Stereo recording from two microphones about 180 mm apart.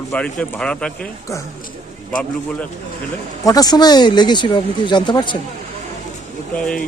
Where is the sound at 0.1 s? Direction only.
5° left (ahead or behind).